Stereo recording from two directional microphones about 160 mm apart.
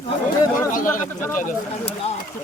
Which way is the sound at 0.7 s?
55° left (ahead or behind).